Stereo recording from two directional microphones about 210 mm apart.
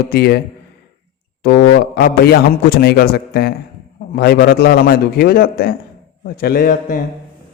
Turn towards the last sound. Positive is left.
turn(degrees=45)  # may be behind; listen again after turning